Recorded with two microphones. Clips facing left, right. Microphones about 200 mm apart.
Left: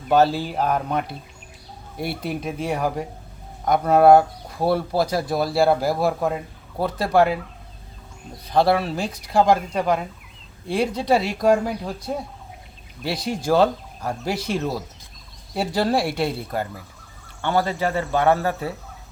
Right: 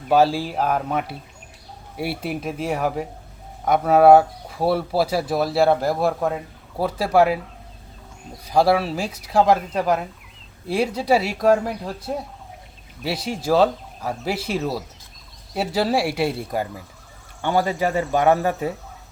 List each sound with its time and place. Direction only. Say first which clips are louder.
0.1 s speech: even; 5° right (ahead or behind)